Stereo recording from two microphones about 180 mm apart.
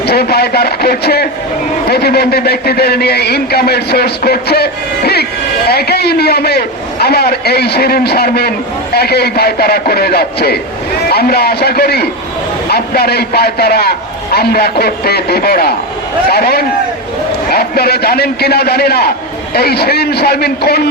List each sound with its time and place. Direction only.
0.0 s a man's voice: 60° left (ahead or behind)